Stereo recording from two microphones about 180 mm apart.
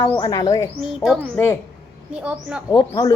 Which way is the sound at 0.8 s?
Centre (ahead or behind).